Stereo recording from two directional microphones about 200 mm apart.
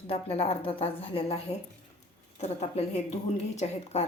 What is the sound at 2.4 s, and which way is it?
A woman's voice, 35° left (ahead or behind).